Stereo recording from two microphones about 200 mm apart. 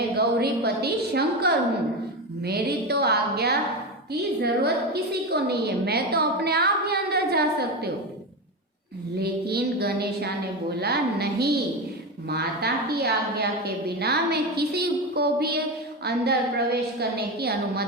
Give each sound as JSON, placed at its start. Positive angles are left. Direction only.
{"t": 0.2, "sound": "a woman's voice", "side_deg": -55}
{"t": 9.2, "sound": "a woman's voice", "side_deg": -55}